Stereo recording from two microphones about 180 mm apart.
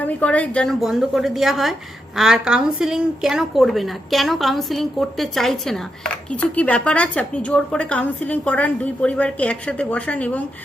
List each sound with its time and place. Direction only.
0.0 s a woman's voice: 10° left (ahead or behind)